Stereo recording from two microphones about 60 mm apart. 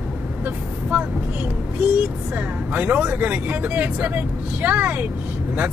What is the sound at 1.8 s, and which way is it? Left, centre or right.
Speech, centre.